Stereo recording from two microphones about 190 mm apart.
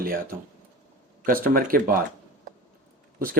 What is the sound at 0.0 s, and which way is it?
Speech, 50° right (ahead or behind).